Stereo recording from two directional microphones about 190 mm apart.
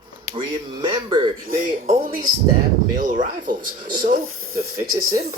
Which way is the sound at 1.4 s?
45° right (ahead or behind).